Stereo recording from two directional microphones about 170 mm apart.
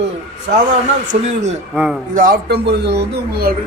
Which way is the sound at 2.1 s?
55° right (ahead or behind).